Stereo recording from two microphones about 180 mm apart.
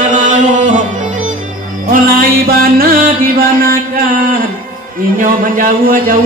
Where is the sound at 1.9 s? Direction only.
50° right (ahead or behind).